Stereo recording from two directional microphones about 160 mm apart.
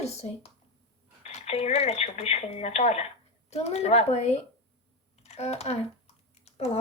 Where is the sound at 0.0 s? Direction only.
40° left (ahead or behind).